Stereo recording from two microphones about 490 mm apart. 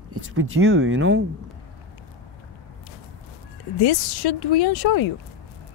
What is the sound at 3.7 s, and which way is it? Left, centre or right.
Speech, left.